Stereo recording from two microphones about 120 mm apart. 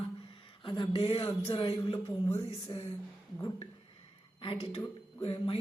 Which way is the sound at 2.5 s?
60° left (ahead or behind).